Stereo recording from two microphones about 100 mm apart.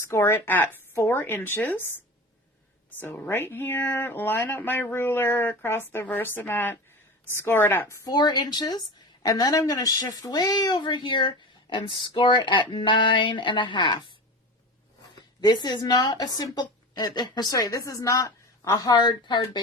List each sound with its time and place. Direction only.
0.1 s speech: 25° left (ahead or behind)
3.0 s speech: 20° left (ahead or behind)
8.0 s speech: 45° left (ahead or behind)
15.4 s speech: 45° left (ahead or behind)